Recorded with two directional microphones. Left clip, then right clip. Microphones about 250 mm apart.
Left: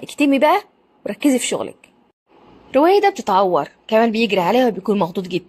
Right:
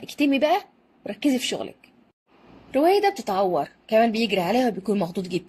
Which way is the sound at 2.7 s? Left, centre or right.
Centre.